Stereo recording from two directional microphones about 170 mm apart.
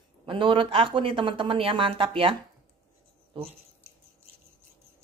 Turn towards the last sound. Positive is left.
turn(degrees=-35)  # may be behind; listen again after turning